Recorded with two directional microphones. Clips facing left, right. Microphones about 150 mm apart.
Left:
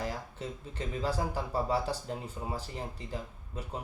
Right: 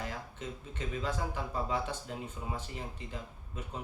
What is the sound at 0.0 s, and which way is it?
Speech, 35° left (ahead or behind).